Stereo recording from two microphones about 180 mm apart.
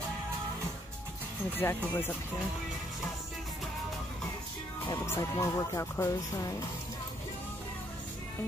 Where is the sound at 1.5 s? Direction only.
10° left (ahead or behind).